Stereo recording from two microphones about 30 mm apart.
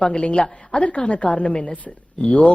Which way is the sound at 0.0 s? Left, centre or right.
Left.